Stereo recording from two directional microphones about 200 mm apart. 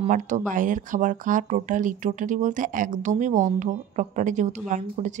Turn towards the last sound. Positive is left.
turn(degrees=-40)  # may be behind; listen again after turning